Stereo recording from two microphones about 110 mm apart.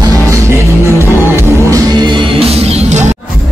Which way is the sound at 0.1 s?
25° right (ahead or behind).